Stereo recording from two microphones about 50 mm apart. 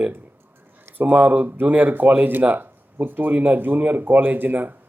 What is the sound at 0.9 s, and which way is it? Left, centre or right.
Speech, right.